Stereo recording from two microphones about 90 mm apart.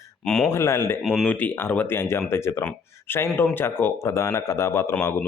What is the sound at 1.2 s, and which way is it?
A man's voice, 20° left (ahead or behind).